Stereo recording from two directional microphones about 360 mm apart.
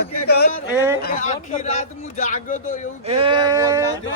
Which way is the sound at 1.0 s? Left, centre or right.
Centre.